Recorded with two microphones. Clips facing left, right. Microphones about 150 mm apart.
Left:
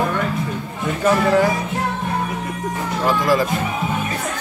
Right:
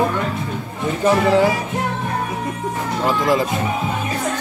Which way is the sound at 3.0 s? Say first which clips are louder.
Even; 20° right (ahead or behind).